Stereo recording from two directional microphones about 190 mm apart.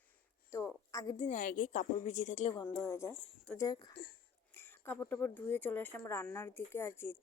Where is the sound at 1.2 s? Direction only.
40° left (ahead or behind).